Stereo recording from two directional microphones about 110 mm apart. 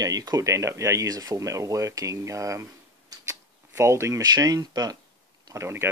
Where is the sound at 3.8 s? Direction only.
25° right (ahead or behind).